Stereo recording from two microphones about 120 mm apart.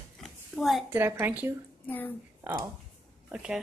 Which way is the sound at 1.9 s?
15° left (ahead or behind).